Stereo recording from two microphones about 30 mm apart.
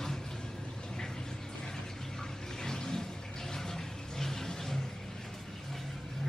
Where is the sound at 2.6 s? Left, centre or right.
Centre.